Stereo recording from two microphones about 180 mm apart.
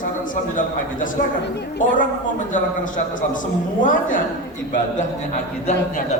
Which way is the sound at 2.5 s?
45° left (ahead or behind).